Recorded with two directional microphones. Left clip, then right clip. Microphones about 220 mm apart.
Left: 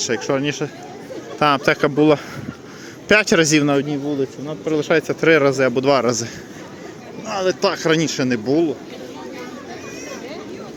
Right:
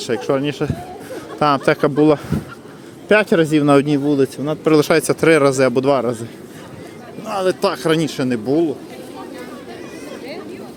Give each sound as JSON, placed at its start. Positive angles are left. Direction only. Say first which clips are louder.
{"t": 0.0, "sound": "speech", "louder": "right 1 dB", "side_deg": -10}
{"t": 3.1, "sound": "speech", "louder": "even", "side_deg": 0}
{"t": 3.8, "sound": "speech", "louder": "right 6 dB", "side_deg": -45}
{"t": 5.9, "sound": "speech", "louder": "even", "side_deg": 0}
{"t": 7.3, "sound": "speech", "louder": "right 1 dB", "side_deg": -10}